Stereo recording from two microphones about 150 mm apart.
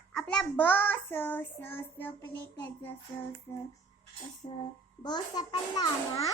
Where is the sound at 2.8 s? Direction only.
15° left (ahead or behind).